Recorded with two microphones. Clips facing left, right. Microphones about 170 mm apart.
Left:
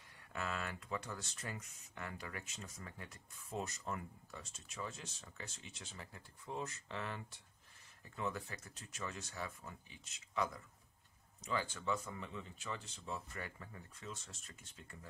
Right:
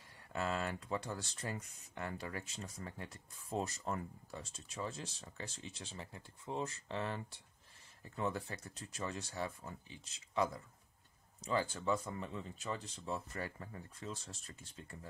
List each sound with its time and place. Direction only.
0.3 s speech: 30° right (ahead or behind)